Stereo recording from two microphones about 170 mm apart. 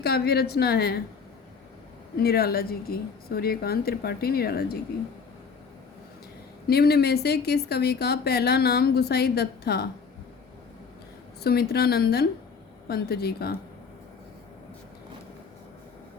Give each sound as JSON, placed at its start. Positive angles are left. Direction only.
{"t": 0.0, "sound": "a woman's voice", "side_deg": 70}
{"t": 2.1, "sound": "a woman's voice", "side_deg": 65}
{"t": 6.7, "sound": "a woman's voice", "side_deg": 70}
{"t": 11.4, "sound": "a woman's voice", "side_deg": 70}